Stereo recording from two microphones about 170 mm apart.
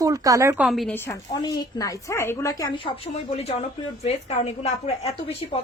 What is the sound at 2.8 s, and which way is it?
Speech, 35° left (ahead or behind).